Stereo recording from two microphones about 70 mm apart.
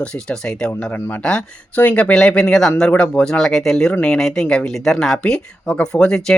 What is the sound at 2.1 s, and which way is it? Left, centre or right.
Speech, centre.